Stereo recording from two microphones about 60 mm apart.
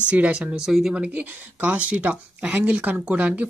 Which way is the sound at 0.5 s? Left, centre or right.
Centre.